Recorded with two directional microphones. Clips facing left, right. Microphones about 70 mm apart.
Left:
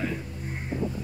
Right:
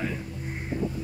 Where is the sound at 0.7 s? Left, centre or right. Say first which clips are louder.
Even; left.